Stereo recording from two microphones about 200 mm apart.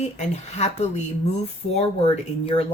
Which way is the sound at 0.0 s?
35° left (ahead or behind).